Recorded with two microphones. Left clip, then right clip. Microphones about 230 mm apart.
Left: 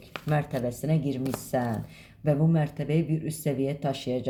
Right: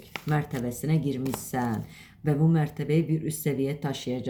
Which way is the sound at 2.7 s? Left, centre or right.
Left.